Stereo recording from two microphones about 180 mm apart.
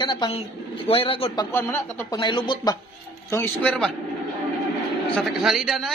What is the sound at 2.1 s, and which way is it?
Speech, 25° left (ahead or behind).